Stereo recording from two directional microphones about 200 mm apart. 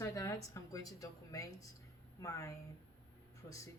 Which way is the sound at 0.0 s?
15° left (ahead or behind).